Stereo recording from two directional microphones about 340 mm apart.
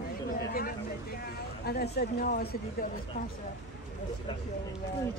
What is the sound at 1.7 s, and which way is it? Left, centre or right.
Speech, left.